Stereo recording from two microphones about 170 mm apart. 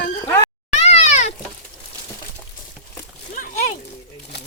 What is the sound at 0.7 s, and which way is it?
Cat, 40° left (ahead or behind).